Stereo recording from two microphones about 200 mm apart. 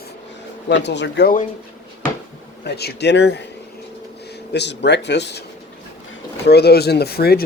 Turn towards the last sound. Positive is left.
turn(degrees=50)  # may be behind; listen again after turning